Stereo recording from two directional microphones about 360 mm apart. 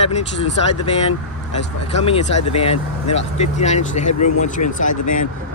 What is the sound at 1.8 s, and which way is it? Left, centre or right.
Speech, centre.